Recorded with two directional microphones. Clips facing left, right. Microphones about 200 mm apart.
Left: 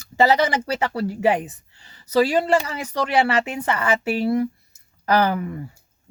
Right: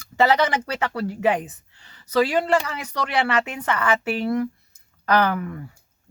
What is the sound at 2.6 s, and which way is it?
Speech, 30° left (ahead or behind).